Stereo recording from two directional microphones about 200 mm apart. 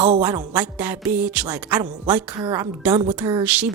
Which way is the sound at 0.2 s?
5° right (ahead or behind).